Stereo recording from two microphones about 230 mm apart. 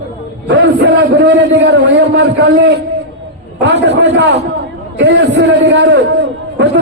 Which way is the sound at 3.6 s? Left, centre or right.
Right.